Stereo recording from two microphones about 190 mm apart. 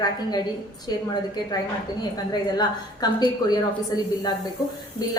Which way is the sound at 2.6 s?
20° left (ahead or behind).